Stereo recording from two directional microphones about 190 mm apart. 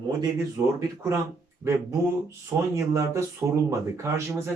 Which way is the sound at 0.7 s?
15° right (ahead or behind).